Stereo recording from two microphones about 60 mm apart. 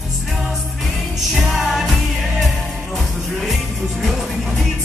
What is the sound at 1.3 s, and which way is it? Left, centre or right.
Music, centre.